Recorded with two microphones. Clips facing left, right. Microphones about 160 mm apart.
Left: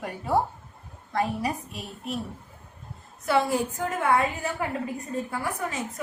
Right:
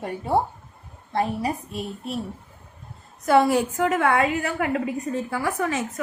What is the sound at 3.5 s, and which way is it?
A woman's voice, 85° right.